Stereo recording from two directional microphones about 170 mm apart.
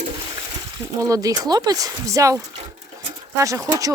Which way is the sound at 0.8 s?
20° right (ahead or behind).